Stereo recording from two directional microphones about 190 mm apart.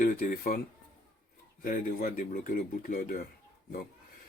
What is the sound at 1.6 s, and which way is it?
Speech, 45° left (ahead or behind).